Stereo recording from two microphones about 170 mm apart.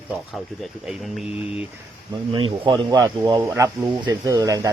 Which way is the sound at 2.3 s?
30° right (ahead or behind).